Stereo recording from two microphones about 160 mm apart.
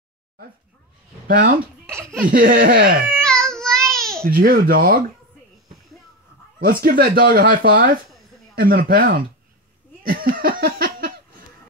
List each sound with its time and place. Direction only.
1.2 s speech: 60° right (ahead or behind)
2.0 s laughter: 15° right (ahead or behind)
2.3 s speech: 65° right (ahead or behind)
3.1 s baby cry: 5° left (ahead or behind)
4.3 s speech: 70° right (ahead or behind)
6.6 s speech: 65° right (ahead or behind)
8.5 s speech: 65° right (ahead or behind)
10.0 s laughter: 65° right (ahead or behind)